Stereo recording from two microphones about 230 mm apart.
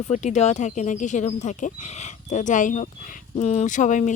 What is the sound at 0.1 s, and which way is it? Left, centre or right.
Speech, left.